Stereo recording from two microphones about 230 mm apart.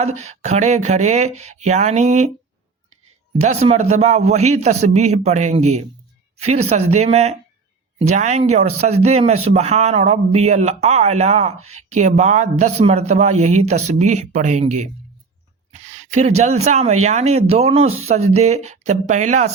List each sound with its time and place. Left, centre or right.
0.2 s speech: right
3.4 s speech: right